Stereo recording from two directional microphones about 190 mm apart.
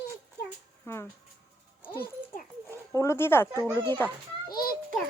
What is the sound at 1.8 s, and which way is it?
Music, 10° left (ahead or behind).